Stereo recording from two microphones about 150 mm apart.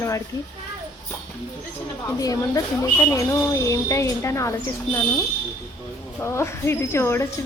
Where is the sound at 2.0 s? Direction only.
25° left (ahead or behind).